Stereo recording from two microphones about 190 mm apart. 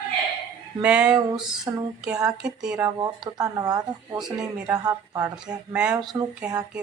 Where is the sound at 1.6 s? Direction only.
20° right (ahead or behind).